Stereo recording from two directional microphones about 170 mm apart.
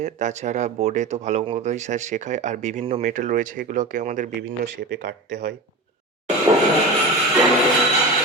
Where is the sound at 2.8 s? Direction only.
35° right (ahead or behind).